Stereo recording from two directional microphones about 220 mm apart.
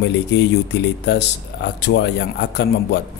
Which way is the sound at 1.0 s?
50° left (ahead or behind).